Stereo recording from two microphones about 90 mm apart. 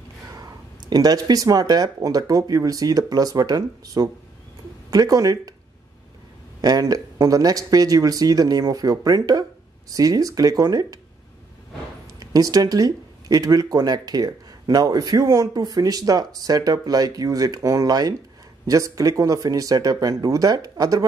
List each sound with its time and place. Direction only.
0.3 s speech: 45° right (ahead or behind)
6.6 s speech: 45° right (ahead or behind)
12.2 s speech: 45° right (ahead or behind)